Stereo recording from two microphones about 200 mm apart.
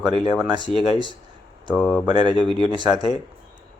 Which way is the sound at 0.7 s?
30° left (ahead or behind).